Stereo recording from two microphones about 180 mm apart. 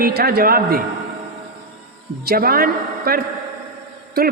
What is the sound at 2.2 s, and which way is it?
A man's voice, 55° right (ahead or behind).